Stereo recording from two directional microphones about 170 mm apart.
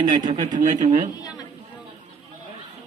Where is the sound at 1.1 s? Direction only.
25° left (ahead or behind).